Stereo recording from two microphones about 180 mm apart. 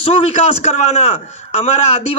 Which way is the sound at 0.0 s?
35° left (ahead or behind).